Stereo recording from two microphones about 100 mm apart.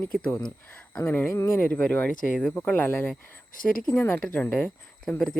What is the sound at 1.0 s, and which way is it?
Speech, 20° left (ahead or behind).